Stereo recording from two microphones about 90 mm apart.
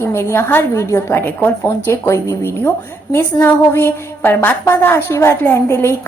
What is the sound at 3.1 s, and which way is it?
A woman's voice, 25° left (ahead or behind).